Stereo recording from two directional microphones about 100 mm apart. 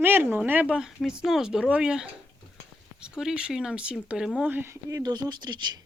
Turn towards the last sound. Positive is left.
turn(degrees=-45)  # may be behind; listen again after turning